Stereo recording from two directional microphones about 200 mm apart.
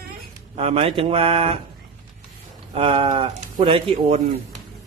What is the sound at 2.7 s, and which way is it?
Speech, 30° right (ahead or behind).